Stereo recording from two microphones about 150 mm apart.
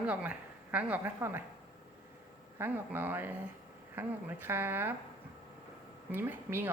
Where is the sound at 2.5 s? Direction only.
15° right (ahead or behind).